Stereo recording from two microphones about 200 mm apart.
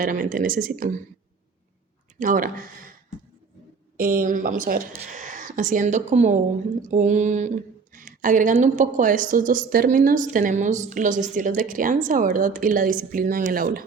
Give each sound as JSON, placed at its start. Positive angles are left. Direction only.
{"t": 0.0, "sound": "a woman's voice", "side_deg": -45}
{"t": 2.1, "sound": "a woman's voice", "side_deg": -40}
{"t": 3.9, "sound": "a woman's voice", "side_deg": -45}